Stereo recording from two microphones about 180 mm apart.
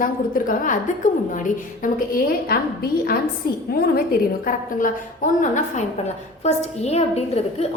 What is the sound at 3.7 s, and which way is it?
A woman's voice, 55° left (ahead or behind).